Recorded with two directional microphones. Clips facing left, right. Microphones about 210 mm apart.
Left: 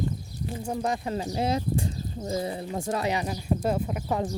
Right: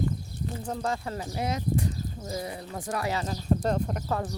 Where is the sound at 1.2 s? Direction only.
30° left (ahead or behind); by 4.2 s 5° left (ahead or behind).